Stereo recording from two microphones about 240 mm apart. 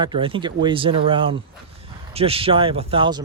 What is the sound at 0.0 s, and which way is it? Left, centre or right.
Speech, right.